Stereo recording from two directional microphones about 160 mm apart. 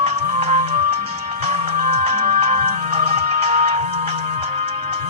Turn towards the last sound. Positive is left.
turn(degrees=-40)  # may be behind; listen again after turning